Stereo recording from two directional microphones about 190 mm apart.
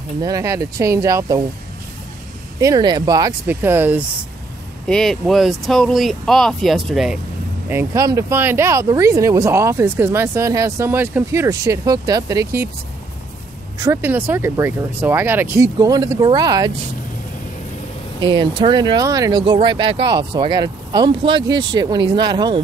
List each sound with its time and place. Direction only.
0.2 s speech: 15° right (ahead or behind)
2.6 s speech: 20° right (ahead or behind)
4.8 s speech: 5° left (ahead or behind)
7.6 s speech: 15° right (ahead or behind)
13.7 s speech: 15° right (ahead or behind)
18.2 s speech: 25° right (ahead or behind)